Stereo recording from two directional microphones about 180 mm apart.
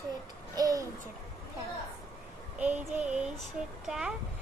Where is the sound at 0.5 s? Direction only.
20° right (ahead or behind).